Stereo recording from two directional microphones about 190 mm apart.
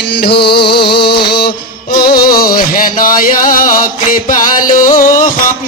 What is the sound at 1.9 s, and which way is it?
Music, 50° left (ahead or behind).